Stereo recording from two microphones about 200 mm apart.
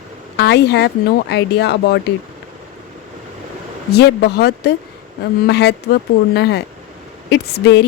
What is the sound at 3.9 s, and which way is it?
Speech, 55° left (ahead or behind).